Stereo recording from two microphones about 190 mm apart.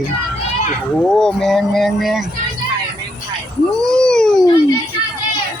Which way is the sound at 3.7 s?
5° left (ahead or behind).